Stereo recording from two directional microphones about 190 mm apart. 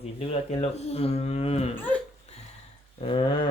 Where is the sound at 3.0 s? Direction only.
30° left (ahead or behind).